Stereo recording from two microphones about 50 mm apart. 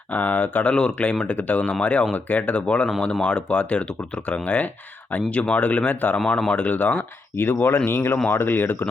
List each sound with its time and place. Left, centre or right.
0.1 s speech: left
0.7 s speech: centre; by 6.1 s left
6.1 s speech: centre
6.5 s speech: left
7.3 s speech: left